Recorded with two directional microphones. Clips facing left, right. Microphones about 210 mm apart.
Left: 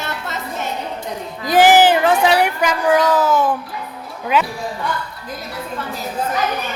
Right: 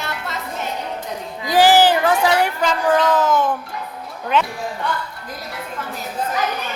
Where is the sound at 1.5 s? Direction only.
20° left (ahead or behind).